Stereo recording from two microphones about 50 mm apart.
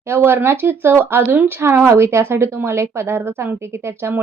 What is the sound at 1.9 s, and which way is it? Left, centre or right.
A woman's voice, right.